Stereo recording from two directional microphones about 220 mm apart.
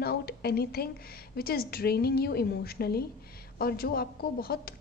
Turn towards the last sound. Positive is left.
turn(degrees=45)  # may be behind; listen again after turning